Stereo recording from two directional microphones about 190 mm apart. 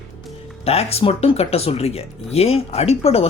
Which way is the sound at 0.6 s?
30° left (ahead or behind).